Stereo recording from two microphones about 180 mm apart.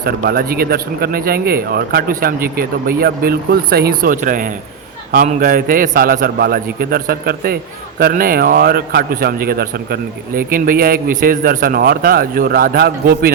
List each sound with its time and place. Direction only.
0.0 s a man's voice: 55° right (ahead or behind)